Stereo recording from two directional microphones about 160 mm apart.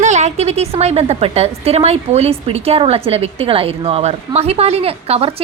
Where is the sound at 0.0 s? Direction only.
45° right (ahead or behind).